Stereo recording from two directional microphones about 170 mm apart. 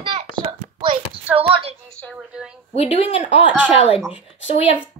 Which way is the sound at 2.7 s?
35° left (ahead or behind).